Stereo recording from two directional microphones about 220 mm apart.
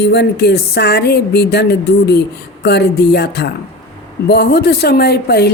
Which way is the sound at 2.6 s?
50° left (ahead or behind).